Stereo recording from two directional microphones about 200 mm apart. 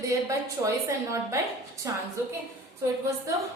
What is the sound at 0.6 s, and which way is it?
A woman's voice, 15° right (ahead or behind).